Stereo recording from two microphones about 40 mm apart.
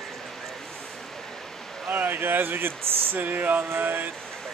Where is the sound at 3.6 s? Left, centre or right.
Right.